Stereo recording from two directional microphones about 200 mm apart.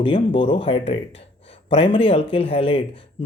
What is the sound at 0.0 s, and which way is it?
Speech, 25° left (ahead or behind).